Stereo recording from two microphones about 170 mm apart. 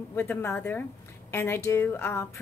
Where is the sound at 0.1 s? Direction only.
10° left (ahead or behind).